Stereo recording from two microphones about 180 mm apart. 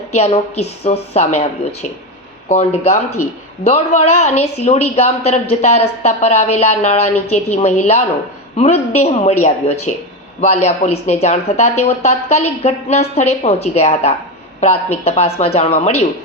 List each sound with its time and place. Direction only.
0.1 s a woman's voice: 35° left (ahead or behind)